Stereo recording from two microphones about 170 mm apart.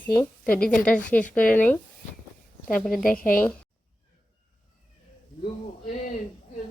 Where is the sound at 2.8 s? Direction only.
Centre (ahead or behind).